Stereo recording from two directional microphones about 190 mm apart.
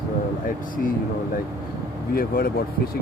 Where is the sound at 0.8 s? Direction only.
50° left (ahead or behind).